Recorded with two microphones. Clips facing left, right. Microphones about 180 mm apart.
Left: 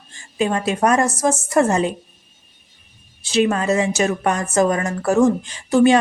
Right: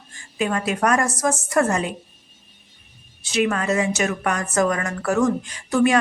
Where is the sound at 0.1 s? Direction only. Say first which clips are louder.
Left 3 dB; 25° left (ahead or behind).